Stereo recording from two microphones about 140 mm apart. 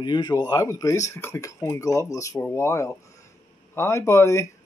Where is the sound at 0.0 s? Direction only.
30° left (ahead or behind).